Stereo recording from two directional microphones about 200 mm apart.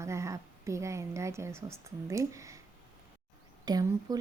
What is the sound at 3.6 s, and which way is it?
Speech, 20° right (ahead or behind).